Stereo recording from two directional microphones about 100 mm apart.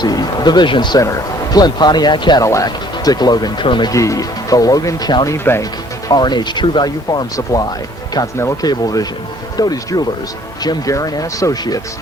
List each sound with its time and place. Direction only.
0.0 s speech: 40° left (ahead or behind)
1.0 s speech: 35° left (ahead or behind)
2.4 s speech: 35° left (ahead or behind); by 3.9 s 50° left (ahead or behind)
3.9 s speech: 30° left (ahead or behind)
5.3 s speech: 30° left (ahead or behind)
6.1 s speech: 45° left (ahead or behind)
8.6 s speech: 40° left (ahead or behind)